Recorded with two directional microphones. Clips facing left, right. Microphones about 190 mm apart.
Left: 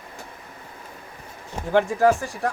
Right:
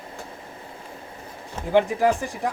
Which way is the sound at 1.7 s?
15° right (ahead or behind).